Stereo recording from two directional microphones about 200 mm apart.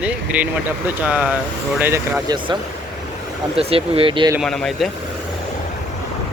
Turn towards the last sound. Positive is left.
turn(degrees=0)  # may be behind; listen again after turning